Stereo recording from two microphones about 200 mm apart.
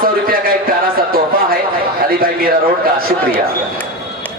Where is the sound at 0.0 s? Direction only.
45° right (ahead or behind).